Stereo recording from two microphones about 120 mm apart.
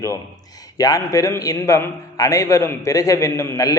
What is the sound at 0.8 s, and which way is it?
A man's voice, 30° left (ahead or behind).